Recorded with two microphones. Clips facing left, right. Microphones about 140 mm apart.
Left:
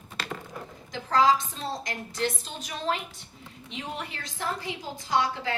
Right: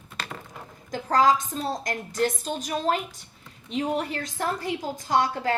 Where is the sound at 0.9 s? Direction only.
45° right (ahead or behind).